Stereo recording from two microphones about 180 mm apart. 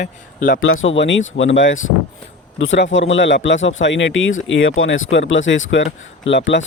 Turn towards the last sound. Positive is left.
turn(degrees=90)